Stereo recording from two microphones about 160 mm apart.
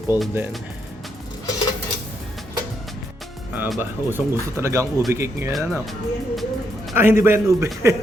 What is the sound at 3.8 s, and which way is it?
Speech, 15° right (ahead or behind).